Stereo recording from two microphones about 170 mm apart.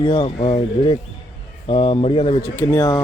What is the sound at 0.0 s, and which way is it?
Speech, 30° left (ahead or behind).